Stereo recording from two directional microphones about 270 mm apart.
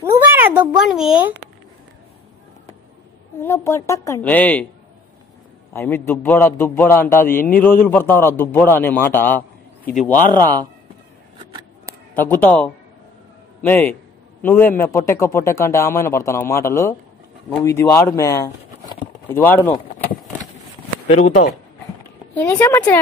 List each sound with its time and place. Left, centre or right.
0.0 s a sound: centre
3.4 s a man's voice: centre
5.7 s a man's voice: centre
12.1 s a man's voice: centre
21.1 s speech: left
22.3 s a man's voice: centre